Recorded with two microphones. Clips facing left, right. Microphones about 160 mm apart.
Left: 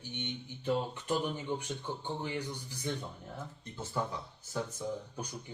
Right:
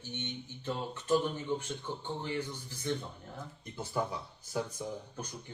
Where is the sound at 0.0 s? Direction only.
15° left (ahead or behind).